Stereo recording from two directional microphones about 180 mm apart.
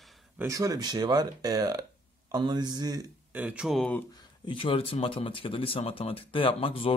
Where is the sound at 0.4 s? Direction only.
20° right (ahead or behind).